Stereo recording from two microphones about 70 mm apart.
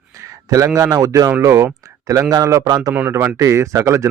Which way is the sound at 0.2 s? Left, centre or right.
Right.